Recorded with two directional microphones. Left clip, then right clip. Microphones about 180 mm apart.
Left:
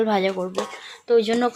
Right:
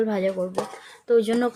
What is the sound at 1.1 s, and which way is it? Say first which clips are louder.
Speech: left 2 dB; 15° right (ahead or behind).